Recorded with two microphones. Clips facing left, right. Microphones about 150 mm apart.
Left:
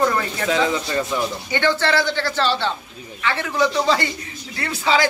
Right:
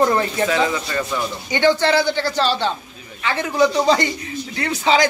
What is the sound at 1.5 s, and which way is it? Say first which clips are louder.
A man's voice: right 4 dB; 15° right (ahead or behind).